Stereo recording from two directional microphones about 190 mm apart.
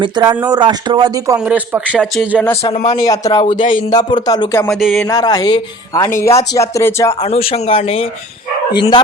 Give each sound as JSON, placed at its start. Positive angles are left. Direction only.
{"t": 0.0, "sound": "speech", "side_deg": -25}
{"t": 1.4, "sound": "speech", "side_deg": -5}
{"t": 2.6, "sound": "speech", "side_deg": 35}
{"t": 3.0, "sound": "speech", "side_deg": 20}
{"t": 4.7, "sound": "speech", "side_deg": 0}
{"t": 5.0, "sound": "speech", "side_deg": 20}
{"t": 7.3, "sound": "speech", "side_deg": 30}